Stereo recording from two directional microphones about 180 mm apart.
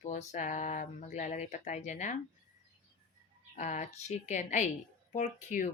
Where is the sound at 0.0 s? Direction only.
40° left (ahead or behind).